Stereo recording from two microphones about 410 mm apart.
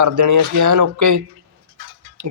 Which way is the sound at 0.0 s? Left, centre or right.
Right.